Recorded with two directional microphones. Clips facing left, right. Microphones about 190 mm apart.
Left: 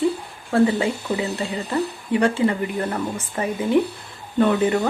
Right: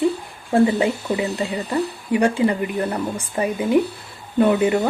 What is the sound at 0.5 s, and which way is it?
Speech, 20° right (ahead or behind).